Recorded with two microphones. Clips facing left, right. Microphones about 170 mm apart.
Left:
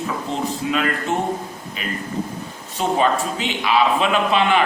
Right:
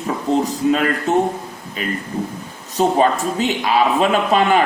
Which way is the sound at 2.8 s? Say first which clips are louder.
Right 3 dB; 40° right (ahead or behind).